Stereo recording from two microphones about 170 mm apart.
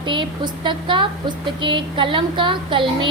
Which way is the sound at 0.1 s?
30° right (ahead or behind).